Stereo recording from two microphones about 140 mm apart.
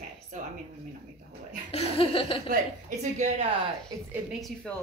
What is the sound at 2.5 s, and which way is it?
Speech, 55° right (ahead or behind).